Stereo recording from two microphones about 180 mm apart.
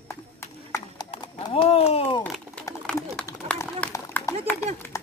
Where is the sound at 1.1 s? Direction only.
30° left (ahead or behind).